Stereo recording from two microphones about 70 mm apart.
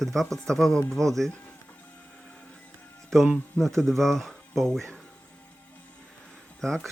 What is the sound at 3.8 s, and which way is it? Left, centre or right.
Speech, centre.